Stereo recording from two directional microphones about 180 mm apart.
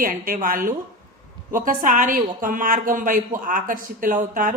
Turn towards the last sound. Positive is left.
turn(degrees=-50)  # may be behind; listen again after turning